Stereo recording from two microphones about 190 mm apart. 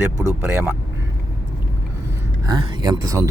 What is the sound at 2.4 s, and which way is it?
Speech, 25° right (ahead or behind).